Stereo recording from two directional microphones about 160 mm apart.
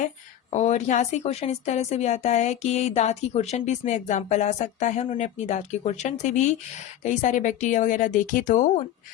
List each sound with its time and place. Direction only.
0.5 s speech: 45° left (ahead or behind)